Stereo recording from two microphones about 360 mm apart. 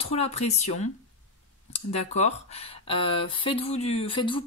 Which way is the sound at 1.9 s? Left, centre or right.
Centre.